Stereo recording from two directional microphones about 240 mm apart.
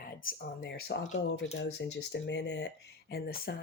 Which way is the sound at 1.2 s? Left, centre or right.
Left.